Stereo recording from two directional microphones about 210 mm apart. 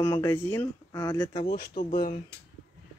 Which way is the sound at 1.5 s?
50° left (ahead or behind).